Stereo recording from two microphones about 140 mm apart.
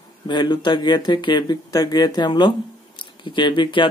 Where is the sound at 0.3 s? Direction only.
30° left (ahead or behind).